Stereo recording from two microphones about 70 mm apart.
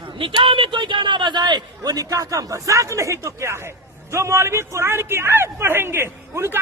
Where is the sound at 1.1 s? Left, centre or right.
Right.